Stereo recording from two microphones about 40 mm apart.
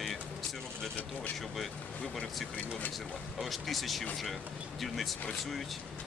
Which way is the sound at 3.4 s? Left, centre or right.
Centre.